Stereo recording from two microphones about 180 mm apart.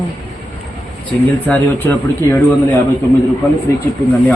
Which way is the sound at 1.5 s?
10° left (ahead or behind).